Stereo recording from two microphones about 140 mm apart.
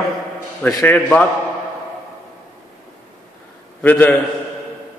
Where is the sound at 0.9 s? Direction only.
10° left (ahead or behind).